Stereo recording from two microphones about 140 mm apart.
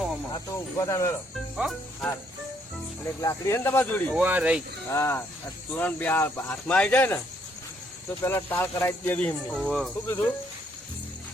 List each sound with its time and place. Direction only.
0.3 s speech: 20° left (ahead or behind)
1.5 s speech: centre (ahead or behind)
3.2 s speech: 20° left (ahead or behind)
4.1 s speech: 10° right (ahead or behind)
4.9 s speech: 20° left (ahead or behind)
8.2 s speech: 15° left (ahead or behind)
9.5 s speech: centre (ahead or behind)